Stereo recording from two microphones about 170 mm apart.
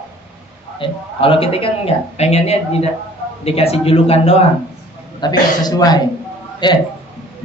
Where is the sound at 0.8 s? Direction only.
30° left (ahead or behind).